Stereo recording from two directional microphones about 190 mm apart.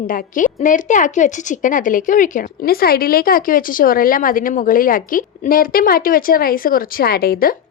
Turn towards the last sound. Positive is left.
turn(degrees=55)  # may be behind; listen again after turning